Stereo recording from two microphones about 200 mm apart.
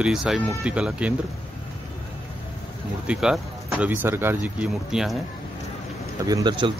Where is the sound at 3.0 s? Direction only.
5° right (ahead or behind).